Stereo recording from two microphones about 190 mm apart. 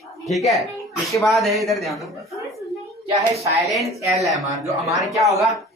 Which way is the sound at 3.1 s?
35° right (ahead or behind).